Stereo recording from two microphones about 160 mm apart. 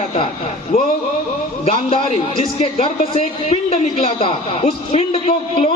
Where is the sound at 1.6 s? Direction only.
35° left (ahead or behind).